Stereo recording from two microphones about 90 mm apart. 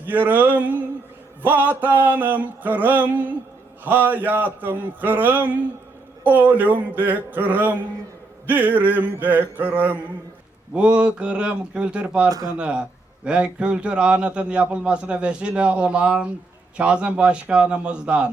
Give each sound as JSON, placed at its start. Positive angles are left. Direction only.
{"t": 0.0, "sound": "a sound", "side_deg": -20}
{"t": 10.8, "sound": "a man's voice", "side_deg": -10}
{"t": 12.3, "sound": "speech", "side_deg": -40}
{"t": 12.5, "sound": "a man's voice", "side_deg": -10}